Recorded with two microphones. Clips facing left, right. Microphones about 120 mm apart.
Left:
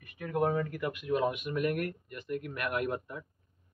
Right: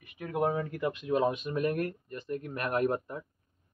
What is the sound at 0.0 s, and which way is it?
Speech, 15° right (ahead or behind).